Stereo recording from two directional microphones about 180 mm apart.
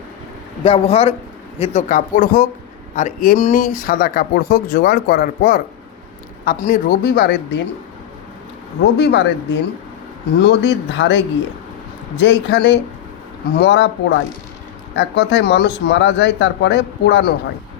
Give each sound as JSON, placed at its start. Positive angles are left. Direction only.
{"t": 0.6, "sound": "a man's voice", "side_deg": 30}
{"t": 8.8, "sound": "speech", "side_deg": 70}